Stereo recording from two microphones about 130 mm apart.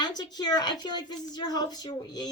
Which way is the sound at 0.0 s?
30° left (ahead or behind).